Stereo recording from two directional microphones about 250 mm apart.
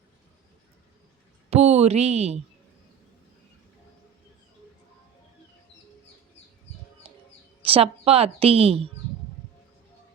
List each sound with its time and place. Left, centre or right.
1.5 s speech: right
7.1 s chirp: right
7.6 s a woman's voice: right